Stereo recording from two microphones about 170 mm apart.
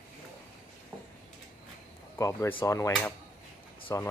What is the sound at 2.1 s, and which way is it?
Speech, 15° left (ahead or behind).